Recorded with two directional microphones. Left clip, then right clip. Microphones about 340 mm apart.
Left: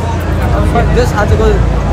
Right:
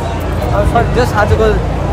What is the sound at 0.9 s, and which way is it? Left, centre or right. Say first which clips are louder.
Speech: even; centre.